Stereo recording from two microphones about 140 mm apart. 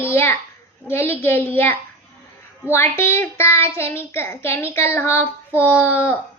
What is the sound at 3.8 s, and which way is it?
A child's voice, 20° left (ahead or behind).